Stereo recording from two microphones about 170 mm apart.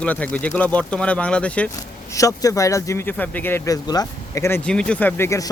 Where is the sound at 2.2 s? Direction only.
20° left (ahead or behind).